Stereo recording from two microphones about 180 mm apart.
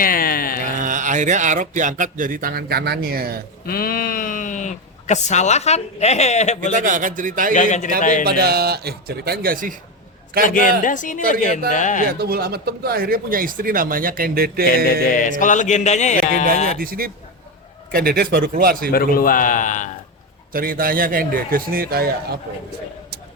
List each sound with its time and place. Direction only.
0.0 s a sound: 55° left (ahead or behind)
0.8 s speech: 45° right (ahead or behind)
3.7 s speech: 55° left (ahead or behind); by 6.6 s 40° left (ahead or behind)
6.7 s speech: 45° right (ahead or behind)
7.5 s music: 45° left (ahead or behind)
8.3 s speech: 60° right (ahead or behind)
10.4 s music: 45° left (ahead or behind)
12.2 s speech: 60° right (ahead or behind)
15.0 s music: 45° left (ahead or behind)
16.7 s speech: 55° right (ahead or behind)
18.9 s music: 55° left (ahead or behind)
20.5 s speech: 55° right (ahead or behind)